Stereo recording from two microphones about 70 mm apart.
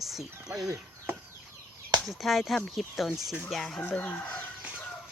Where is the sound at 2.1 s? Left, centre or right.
Centre.